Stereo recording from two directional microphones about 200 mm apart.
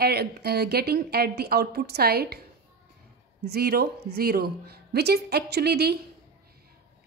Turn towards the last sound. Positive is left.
turn(degrees=-55)  # may be behind; listen again after turning